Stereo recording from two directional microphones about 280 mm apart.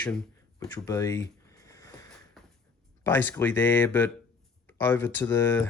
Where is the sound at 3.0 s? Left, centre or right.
Centre.